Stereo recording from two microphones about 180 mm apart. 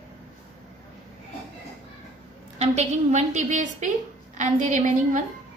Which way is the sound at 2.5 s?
40° right (ahead or behind).